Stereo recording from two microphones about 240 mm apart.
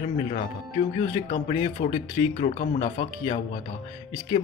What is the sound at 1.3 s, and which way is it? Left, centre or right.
Speech, left.